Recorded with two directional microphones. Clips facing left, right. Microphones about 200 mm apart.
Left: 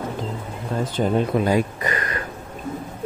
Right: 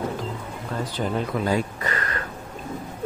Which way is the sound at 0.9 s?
25° left (ahead or behind).